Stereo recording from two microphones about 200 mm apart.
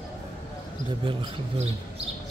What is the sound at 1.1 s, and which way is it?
Speech, 25° right (ahead or behind).